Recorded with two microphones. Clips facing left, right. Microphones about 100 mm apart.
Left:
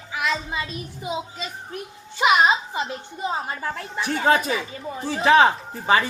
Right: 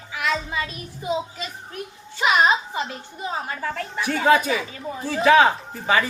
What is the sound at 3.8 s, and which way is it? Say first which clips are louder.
Speech: right 2 dB; 20° left (ahead or behind).